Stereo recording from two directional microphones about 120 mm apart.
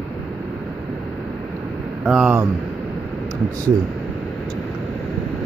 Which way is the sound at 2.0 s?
10° right (ahead or behind).